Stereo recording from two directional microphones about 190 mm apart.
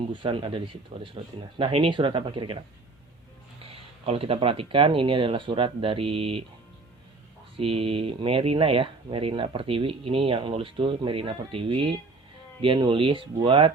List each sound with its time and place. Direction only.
0.1 s speech: 25° right (ahead or behind)
3.6 s speech: 30° right (ahead or behind)
7.5 s speech: 30° right (ahead or behind)